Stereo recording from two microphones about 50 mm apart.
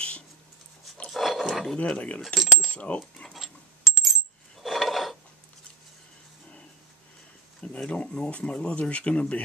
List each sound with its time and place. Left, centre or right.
1.1 s roaring cats: centre
2.0 s speech: left
2.2 s coin: centre
2.7 s cutlery: left
3.3 s coin: centre
4.6 s a sound: centre
7.6 s speech: left